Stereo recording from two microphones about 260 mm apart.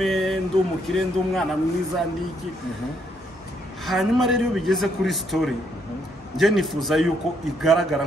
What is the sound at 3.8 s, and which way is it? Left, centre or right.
A man's voice, centre.